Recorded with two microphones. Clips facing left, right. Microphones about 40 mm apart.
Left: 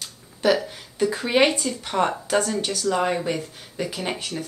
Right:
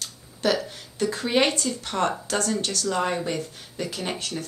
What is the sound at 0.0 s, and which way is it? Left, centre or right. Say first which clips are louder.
Speech: left 3 dB; centre.